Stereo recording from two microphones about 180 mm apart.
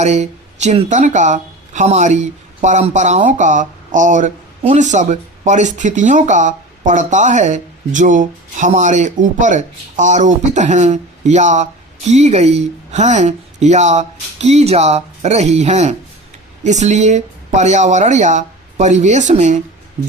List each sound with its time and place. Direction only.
0.0 s speech: 40° right (ahead or behind)